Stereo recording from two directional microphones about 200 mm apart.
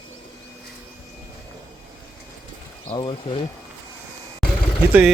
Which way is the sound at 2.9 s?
25° left (ahead or behind).